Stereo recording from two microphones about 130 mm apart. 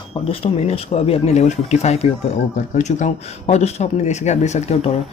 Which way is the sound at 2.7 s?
65° left (ahead or behind).